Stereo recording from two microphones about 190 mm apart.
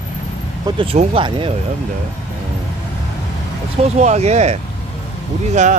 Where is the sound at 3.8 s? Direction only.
40° right (ahead or behind).